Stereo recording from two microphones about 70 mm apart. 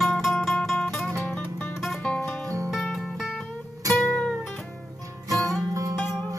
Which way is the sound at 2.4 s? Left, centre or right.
Right.